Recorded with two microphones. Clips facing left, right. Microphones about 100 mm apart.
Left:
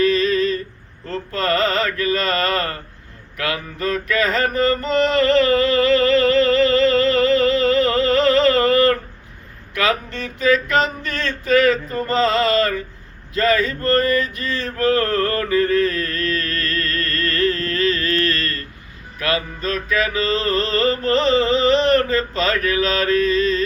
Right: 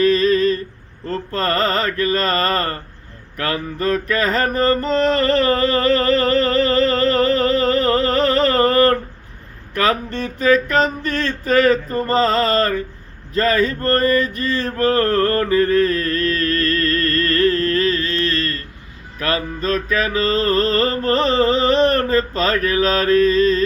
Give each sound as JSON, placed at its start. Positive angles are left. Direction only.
{"t": 0.0, "sound": "humming", "side_deg": -45}
{"t": 1.0, "sound": "mantra", "side_deg": -40}
{"t": 9.7, "sound": "music", "side_deg": -45}
{"t": 13.3, "sound": "male singing", "side_deg": -40}
{"t": 18.0, "sound": "a sound", "side_deg": -25}
{"t": 19.2, "sound": "music", "side_deg": -40}